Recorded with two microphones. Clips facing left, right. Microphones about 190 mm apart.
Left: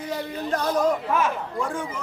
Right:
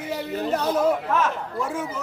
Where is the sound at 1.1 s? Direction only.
10° left (ahead or behind).